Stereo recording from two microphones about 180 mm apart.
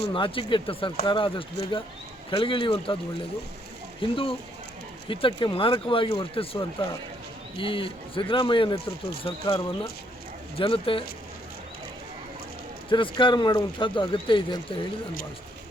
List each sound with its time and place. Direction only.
0.1 s speech: 30° left (ahead or behind)
12.9 s speech: 25° left (ahead or behind)